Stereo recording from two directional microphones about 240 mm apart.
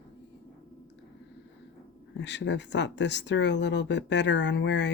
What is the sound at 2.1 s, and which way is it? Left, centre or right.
Speech, left.